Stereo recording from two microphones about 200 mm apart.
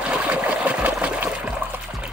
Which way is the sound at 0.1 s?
5° right (ahead or behind).